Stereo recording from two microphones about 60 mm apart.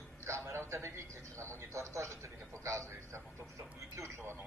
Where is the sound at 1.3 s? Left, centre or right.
Right.